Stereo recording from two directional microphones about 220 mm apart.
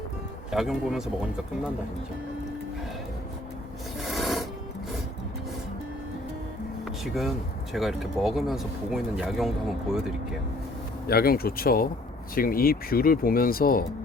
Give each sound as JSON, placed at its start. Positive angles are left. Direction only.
{"t": 0.5, "sound": "speech", "side_deg": 0}
{"t": 4.0, "sound": "a sound", "side_deg": 0}
{"t": 7.7, "sound": "speech", "side_deg": 0}
{"t": 11.0, "sound": "speech", "side_deg": 45}